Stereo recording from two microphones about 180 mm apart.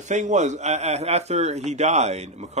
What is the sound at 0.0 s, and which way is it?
A man's voice, 40° right (ahead or behind).